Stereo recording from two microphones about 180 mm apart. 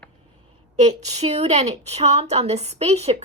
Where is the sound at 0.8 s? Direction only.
40° right (ahead or behind).